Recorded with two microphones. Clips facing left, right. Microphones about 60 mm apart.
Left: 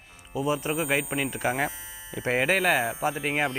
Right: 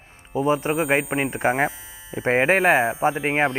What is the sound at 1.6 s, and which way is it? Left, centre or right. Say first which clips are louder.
Speech: right 6 dB; centre.